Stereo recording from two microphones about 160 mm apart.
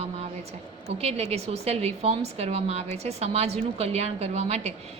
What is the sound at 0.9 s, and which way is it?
A woman's voice, 40° right (ahead or behind).